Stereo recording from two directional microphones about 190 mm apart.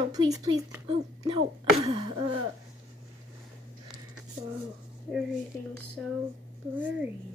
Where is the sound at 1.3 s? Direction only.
30° right (ahead or behind).